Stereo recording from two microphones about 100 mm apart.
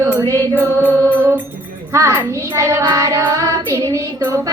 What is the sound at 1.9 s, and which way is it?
Child singing, 30° right (ahead or behind).